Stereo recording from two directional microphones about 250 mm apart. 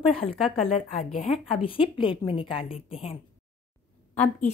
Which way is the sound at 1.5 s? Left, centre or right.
Left.